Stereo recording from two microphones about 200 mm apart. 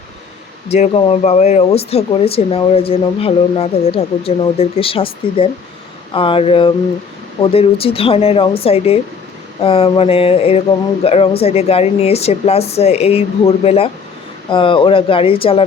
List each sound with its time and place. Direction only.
0.7 s speech: 30° left (ahead or behind)